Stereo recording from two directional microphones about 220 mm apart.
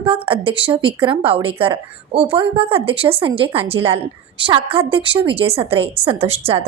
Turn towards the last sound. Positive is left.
turn(degrees=-25)  # may be behind; listen again after turning